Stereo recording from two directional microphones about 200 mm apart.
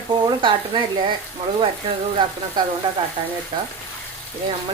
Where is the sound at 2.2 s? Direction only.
20° right (ahead or behind).